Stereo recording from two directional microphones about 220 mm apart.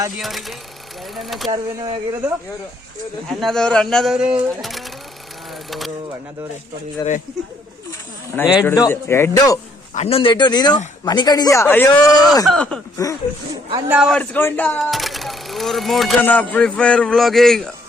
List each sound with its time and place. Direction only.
0.2 s speech: centre (ahead or behind)
1.5 s speech: 20° right (ahead or behind)
3.4 s speech: 5° left (ahead or behind)
7.0 s speech: 20° left (ahead or behind)
8.3 s speech: 10° left (ahead or behind)
9.9 s speech: 30° left (ahead or behind); by 13.1 s 10° left (ahead or behind)
13.5 s speech: 15° right (ahead or behind)
13.9 s speech: 5° right (ahead or behind)
14.2 s speech: 10° left (ahead or behind)